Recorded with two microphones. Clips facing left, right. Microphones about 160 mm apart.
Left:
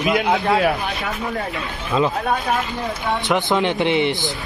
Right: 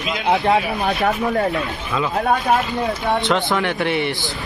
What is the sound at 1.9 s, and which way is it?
Speech, 30° left (ahead or behind).